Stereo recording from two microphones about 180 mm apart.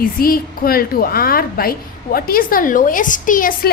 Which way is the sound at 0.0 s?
55° left (ahead or behind).